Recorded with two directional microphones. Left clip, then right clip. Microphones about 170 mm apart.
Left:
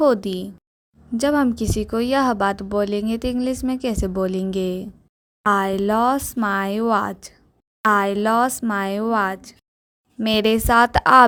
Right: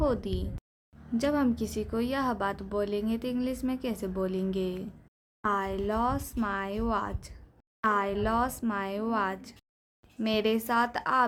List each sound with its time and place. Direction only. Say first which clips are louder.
0.0 s speech: left 12 dB; 50° left (ahead or behind)
10.2 s speech: left 9 dB; 50° left (ahead or behind)